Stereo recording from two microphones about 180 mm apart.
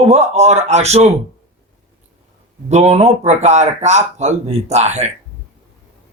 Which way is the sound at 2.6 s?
35° right (ahead or behind).